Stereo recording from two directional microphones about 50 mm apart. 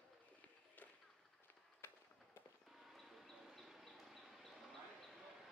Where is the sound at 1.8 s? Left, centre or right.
Left.